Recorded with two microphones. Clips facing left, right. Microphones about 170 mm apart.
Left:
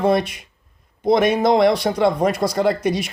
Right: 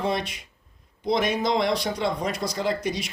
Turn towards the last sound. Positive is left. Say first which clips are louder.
# left 7 dB
turn(degrees=55)  # may be behind; listen again after turning